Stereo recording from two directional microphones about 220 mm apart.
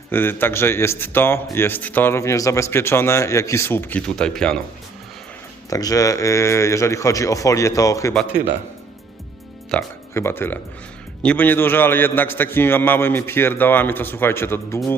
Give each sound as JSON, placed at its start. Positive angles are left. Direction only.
{"t": 0.1, "sound": "a man's voice", "side_deg": 10}
{"t": 5.7, "sound": "a man's voice", "side_deg": 15}
{"t": 8.1, "sound": "speech", "side_deg": 0}
{"t": 9.7, "sound": "a man's voice", "side_deg": 10}